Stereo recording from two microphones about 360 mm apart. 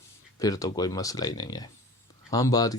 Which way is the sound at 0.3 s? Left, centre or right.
Centre.